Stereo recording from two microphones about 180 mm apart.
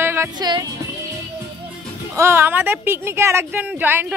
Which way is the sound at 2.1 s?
15° right (ahead or behind).